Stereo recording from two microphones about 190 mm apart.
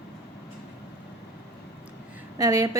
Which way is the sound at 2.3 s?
20° right (ahead or behind).